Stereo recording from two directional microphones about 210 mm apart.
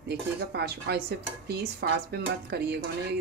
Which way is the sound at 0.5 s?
50° right (ahead or behind).